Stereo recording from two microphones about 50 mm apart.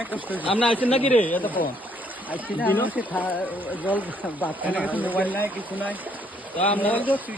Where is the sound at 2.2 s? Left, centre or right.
Right.